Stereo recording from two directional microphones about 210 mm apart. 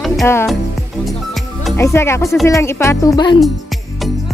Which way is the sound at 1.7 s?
10° left (ahead or behind).